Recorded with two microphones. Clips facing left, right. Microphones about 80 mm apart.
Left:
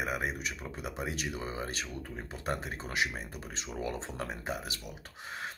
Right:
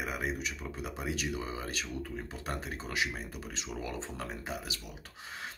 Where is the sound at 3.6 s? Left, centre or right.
Left.